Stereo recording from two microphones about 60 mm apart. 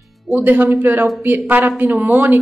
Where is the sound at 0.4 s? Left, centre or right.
Right.